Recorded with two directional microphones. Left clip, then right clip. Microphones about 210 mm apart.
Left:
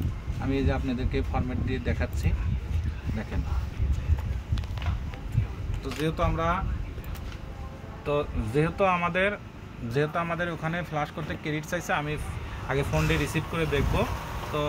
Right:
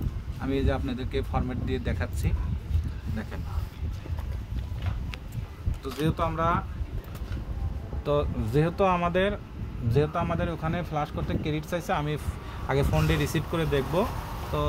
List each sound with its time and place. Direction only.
0.5 s speech: 55° right (ahead or behind)
5.9 s speech: 50° right (ahead or behind)
8.0 s speech: 50° right (ahead or behind)
9.8 s speech: 20° right (ahead or behind)
11.9 s speech: 50° right (ahead or behind)